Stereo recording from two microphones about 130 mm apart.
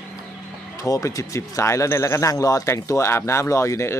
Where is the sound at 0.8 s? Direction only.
25° left (ahead or behind).